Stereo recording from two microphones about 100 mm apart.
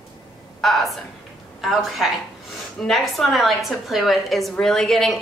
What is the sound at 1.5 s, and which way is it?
A woman's voice, centre (ahead or behind).